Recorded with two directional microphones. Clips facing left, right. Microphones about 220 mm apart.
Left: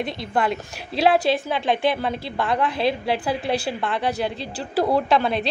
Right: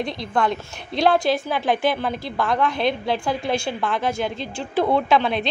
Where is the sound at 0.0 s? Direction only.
5° left (ahead or behind).